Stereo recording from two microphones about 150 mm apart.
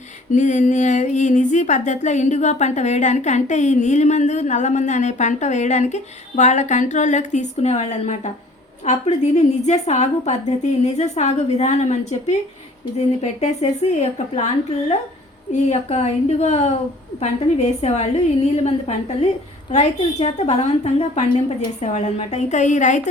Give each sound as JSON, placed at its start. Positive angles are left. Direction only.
{"t": 0.3, "sound": "speech", "side_deg": 55}
{"t": 15.7, "sound": "speech", "side_deg": 45}